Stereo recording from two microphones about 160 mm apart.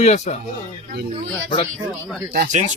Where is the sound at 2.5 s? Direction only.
50° right (ahead or behind).